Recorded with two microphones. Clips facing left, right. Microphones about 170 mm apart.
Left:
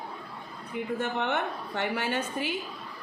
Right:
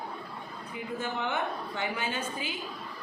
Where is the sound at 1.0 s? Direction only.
65° left (ahead or behind).